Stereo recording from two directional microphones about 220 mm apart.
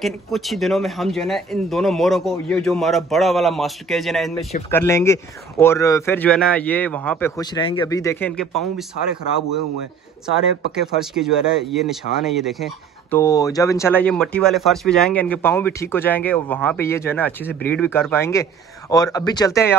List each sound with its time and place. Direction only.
0.0 s speech: centre (ahead or behind)
4.6 s speech: 10° left (ahead or behind)
10.7 s speech: centre (ahead or behind)
13.2 s speech: 15° left (ahead or behind)